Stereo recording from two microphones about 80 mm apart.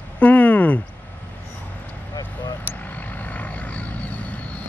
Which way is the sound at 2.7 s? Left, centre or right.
Left.